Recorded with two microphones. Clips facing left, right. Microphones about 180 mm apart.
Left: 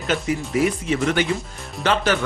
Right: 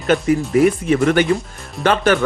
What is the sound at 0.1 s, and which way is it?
Speech, 55° right (ahead or behind).